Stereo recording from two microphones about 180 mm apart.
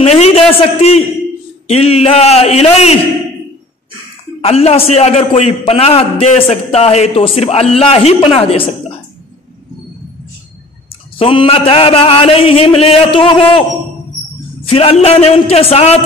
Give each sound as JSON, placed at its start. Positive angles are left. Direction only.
{"t": 0.0, "sound": "a sound", "side_deg": 35}
{"t": 1.7, "sound": "a man's voice", "side_deg": 35}
{"t": 4.4, "sound": "a man's voice", "side_deg": 35}
{"t": 11.1, "sound": "a man's voice", "side_deg": 30}
{"t": 14.7, "sound": "a man's voice", "side_deg": 35}